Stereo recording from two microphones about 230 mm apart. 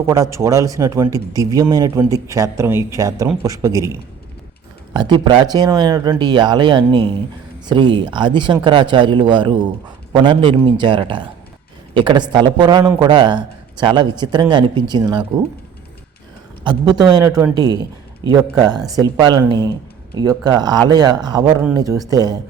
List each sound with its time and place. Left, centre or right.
0.1 s speech: centre
4.9 s a man's voice: centre
16.6 s speech: centre